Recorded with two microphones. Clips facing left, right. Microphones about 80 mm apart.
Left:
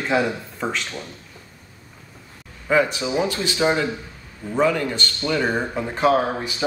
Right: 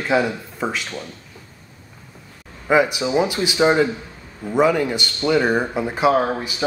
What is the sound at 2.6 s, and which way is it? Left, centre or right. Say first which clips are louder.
Speech: right 2 dB; centre.